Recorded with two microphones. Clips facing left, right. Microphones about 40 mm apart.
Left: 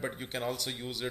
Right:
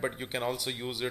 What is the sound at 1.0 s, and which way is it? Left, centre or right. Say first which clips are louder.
Speech: right 3 dB; right.